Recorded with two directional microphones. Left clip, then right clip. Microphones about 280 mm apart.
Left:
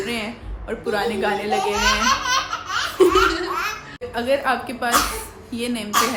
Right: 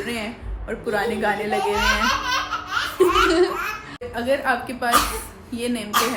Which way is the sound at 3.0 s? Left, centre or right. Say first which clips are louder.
Left 3 dB; left.